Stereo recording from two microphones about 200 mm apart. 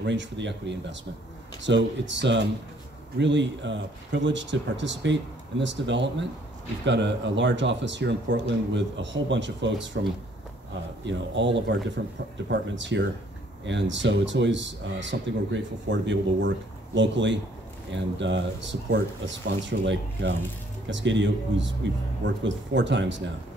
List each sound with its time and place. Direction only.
0.0 s speech: 65° right (ahead or behind)
11.1 s speech: 65° right (ahead or behind)